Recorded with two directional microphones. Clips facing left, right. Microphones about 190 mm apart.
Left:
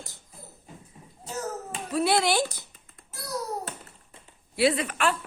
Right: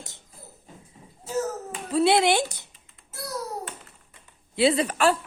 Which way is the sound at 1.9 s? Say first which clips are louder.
Right 4 dB; 25° right (ahead or behind).